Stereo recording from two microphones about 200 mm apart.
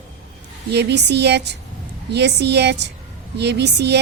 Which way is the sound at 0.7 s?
55° right (ahead or behind).